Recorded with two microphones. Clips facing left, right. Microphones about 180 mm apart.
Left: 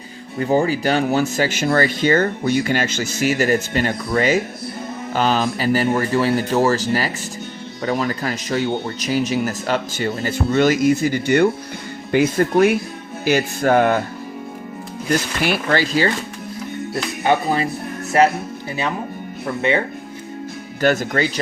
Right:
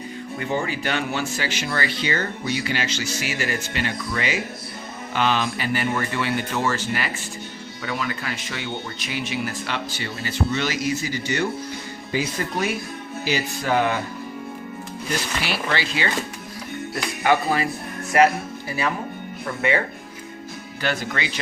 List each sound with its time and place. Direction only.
0.3 s speech: 35° left (ahead or behind)
15.4 s speech: 50° left (ahead or behind)
16.9 s speech: 25° left (ahead or behind)
20.8 s speech: 45° left (ahead or behind)